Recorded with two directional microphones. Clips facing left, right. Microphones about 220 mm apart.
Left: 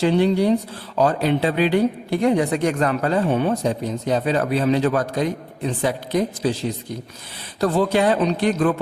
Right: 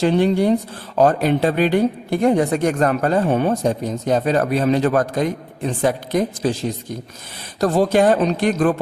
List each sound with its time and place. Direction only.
0.0 s speech: 50° right (ahead or behind)